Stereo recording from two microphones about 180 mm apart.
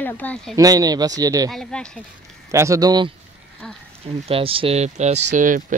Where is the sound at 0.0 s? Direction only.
10° left (ahead or behind).